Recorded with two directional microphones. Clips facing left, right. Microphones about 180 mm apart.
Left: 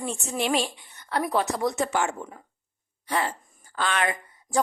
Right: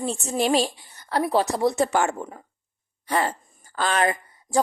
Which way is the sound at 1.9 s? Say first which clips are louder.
Right 4 dB; 45° right (ahead or behind).